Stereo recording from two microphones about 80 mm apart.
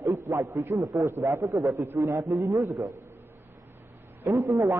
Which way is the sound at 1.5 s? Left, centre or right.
Right.